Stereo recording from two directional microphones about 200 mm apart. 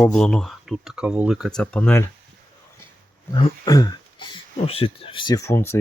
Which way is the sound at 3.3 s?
20° left (ahead or behind).